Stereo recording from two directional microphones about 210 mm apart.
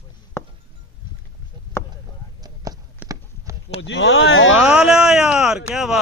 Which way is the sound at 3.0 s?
15° right (ahead or behind).